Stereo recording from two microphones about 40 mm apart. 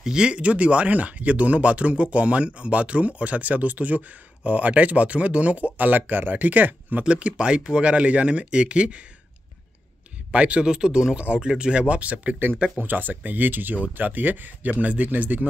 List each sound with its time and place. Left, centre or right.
0.0 s speech: right
7.1 s speech: right
10.3 s speech: right